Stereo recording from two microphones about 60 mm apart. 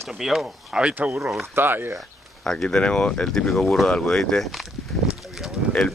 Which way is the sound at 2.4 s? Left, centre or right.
Centre.